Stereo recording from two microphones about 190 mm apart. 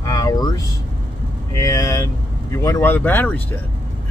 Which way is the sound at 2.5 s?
15° left (ahead or behind).